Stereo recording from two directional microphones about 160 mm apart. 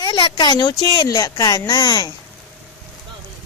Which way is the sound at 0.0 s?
30° left (ahead or behind).